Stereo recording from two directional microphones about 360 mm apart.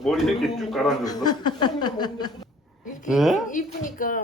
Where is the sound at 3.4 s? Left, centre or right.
Left.